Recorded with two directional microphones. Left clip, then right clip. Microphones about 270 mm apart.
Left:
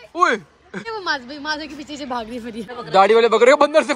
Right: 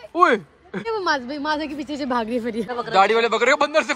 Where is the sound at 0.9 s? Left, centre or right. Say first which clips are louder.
Right 2 dB; right.